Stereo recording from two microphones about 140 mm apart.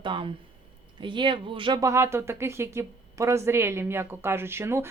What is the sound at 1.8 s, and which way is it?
A woman's voice, 20° right (ahead or behind).